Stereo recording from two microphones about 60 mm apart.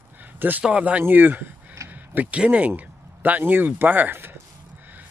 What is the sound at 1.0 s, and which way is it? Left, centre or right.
Speech, right.